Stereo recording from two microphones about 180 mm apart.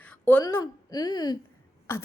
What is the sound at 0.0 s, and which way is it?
A woman's voice, 10° left (ahead or behind).